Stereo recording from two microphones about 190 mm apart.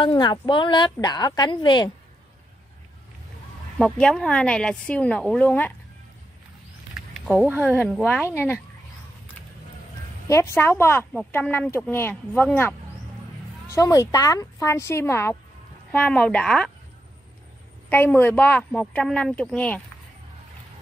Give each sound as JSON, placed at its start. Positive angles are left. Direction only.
{"t": 0.0, "sound": "speech", "side_deg": 25}
{"t": 3.7, "sound": "a woman's voice", "side_deg": 5}
{"t": 6.9, "sound": "a sound", "side_deg": 0}
{"t": 7.6, "sound": "speech", "side_deg": 10}
{"t": 10.2, "sound": "a woman's voice", "side_deg": 15}
{"t": 17.8, "sound": "speech", "side_deg": 10}